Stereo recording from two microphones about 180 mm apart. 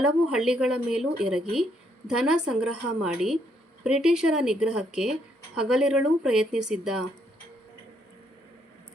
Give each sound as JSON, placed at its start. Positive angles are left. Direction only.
{"t": 0.0, "sound": "a woman's voice", "side_deg": -5}